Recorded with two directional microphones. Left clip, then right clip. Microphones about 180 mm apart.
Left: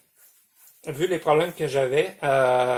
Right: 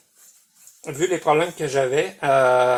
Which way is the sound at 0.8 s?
20° right (ahead or behind).